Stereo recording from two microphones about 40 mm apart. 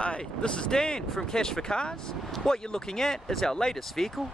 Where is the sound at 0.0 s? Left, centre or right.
Left.